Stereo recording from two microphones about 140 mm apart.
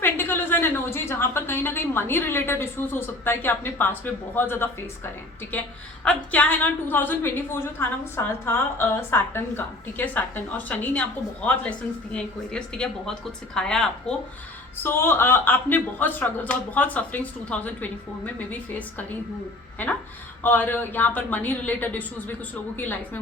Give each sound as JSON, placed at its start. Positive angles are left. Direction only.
{"t": 0.0, "sound": "a woman's voice", "side_deg": 15}
{"t": 6.1, "sound": "a woman's voice", "side_deg": 10}
{"t": 14.8, "sound": "a woman's voice", "side_deg": 15}
{"t": 20.4, "sound": "a woman's voice", "side_deg": 15}